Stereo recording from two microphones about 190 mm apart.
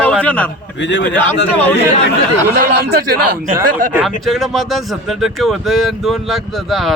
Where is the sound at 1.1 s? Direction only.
10° left (ahead or behind).